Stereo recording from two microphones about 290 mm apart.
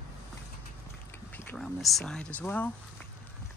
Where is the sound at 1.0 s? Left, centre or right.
Centre.